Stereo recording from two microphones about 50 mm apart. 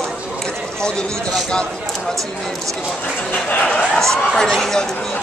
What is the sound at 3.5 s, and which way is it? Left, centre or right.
Speech, left.